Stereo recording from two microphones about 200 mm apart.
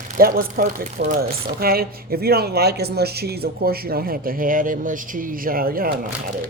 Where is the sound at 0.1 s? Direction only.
45° right (ahead or behind).